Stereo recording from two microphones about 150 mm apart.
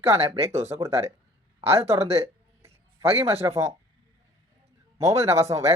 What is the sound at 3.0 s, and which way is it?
Speech, 40° right (ahead or behind).